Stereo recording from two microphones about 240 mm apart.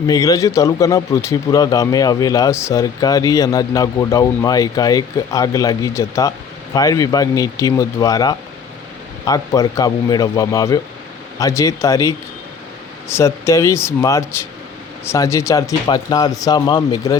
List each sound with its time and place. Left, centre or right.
0.1 s a man's voice: centre